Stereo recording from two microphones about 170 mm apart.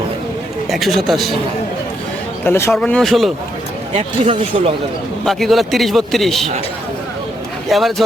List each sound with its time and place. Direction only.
0.7 s a man's voice: centre (ahead or behind)
2.4 s speech: 15° left (ahead or behind)
3.9 s speech: 40° right (ahead or behind)
5.2 s a man's voice: centre (ahead or behind)
7.7 s a man's voice: centre (ahead or behind)